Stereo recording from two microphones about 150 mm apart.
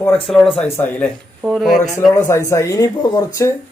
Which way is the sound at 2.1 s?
20° left (ahead or behind).